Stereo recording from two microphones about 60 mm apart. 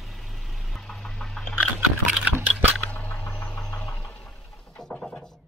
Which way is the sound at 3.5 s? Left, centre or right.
Left.